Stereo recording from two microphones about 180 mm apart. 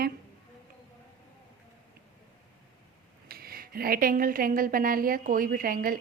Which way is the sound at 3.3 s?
55° right (ahead or behind).